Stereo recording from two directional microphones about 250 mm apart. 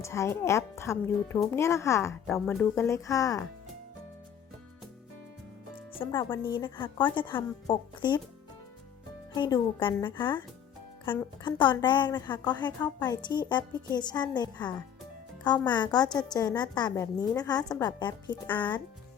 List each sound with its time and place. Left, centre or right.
0.0 s a woman's voice: centre
6.1 s a woman's voice: centre
9.3 s a woman's voice: centre